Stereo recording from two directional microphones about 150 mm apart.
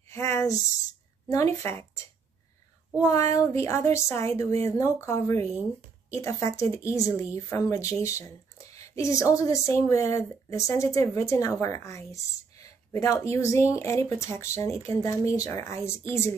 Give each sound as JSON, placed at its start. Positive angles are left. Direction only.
{"t": 0.1, "sound": "a sound", "side_deg": 15}
{"t": 1.3, "sound": "speech", "side_deg": 20}
{"t": 3.0, "sound": "speech", "side_deg": 20}